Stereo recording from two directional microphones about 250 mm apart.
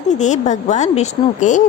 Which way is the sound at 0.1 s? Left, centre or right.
Left.